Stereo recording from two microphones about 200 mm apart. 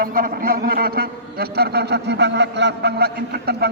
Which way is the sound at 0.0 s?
45° right (ahead or behind).